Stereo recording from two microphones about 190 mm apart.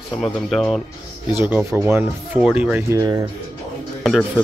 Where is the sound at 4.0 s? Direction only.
Centre (ahead or behind).